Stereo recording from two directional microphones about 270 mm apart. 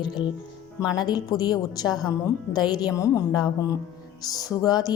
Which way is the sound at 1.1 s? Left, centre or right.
Centre.